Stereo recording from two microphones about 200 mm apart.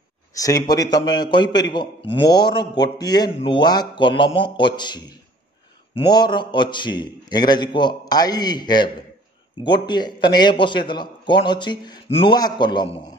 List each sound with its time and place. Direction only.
0.3 s a man's voice: 15° left (ahead or behind)